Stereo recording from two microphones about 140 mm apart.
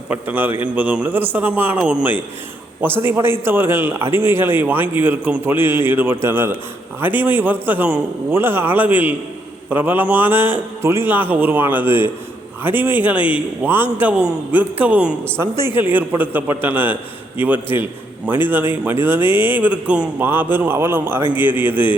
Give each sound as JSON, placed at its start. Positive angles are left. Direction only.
{"t": 0.1, "sound": "a man's voice", "side_deg": -15}